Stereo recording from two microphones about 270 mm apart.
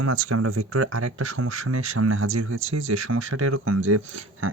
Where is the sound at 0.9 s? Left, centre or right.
Right.